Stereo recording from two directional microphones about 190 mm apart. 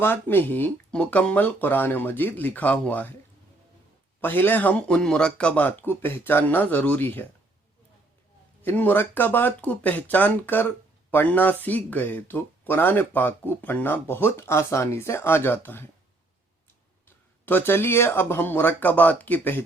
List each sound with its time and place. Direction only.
0.0 s speech: 10° left (ahead or behind)
4.2 s speech: 10° left (ahead or behind)
8.6 s speech: 10° left (ahead or behind)
17.4 s speech: 10° left (ahead or behind)